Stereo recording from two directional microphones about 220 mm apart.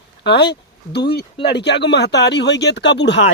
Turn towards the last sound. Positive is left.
turn(degrees=50)  # may be behind; listen again after turning